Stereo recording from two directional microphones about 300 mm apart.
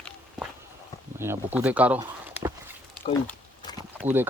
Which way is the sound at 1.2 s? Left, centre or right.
Centre.